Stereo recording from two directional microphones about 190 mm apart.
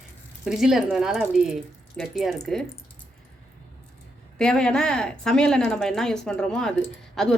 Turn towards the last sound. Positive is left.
turn(degrees=0)  # may be behind; listen again after turning